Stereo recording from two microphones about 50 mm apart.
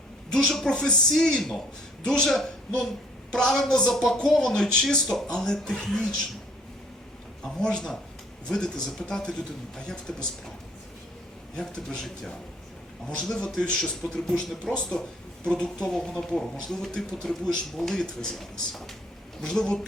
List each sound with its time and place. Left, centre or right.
0.3 s speech: centre
7.6 s speech: centre
11.5 s speech: centre
13.1 s a man's voice: centre
14.7 s speech: centre
15.4 s a man's voice: centre
18.3 s speech: centre